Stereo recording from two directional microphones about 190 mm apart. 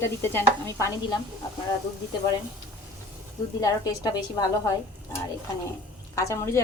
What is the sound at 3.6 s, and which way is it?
A woman's voice, 20° left (ahead or behind).